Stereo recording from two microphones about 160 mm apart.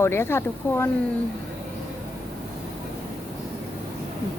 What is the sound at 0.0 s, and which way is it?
Speech, 15° left (ahead or behind).